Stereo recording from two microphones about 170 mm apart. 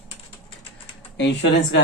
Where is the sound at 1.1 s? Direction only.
90° left.